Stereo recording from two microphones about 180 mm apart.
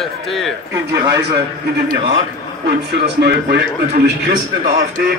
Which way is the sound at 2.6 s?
70° right (ahead or behind).